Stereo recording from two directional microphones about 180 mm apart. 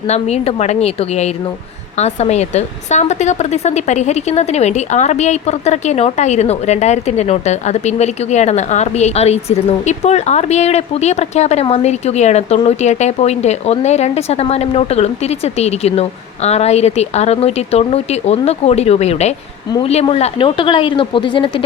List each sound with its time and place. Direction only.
0.1 s speech: 35° left (ahead or behind)